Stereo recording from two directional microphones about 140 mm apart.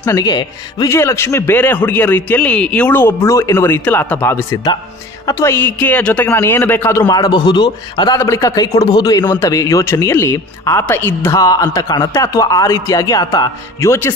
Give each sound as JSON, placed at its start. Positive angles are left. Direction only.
{"t": 0.0, "sound": "speech", "side_deg": 30}
{"t": 0.8, "sound": "a man's voice", "side_deg": 20}
{"t": 8.2, "sound": "speech", "side_deg": 20}